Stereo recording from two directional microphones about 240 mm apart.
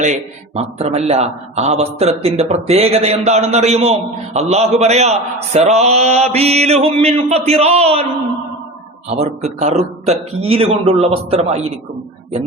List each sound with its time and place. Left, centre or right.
0.0 s a man's voice: right
9.0 s a man's voice: right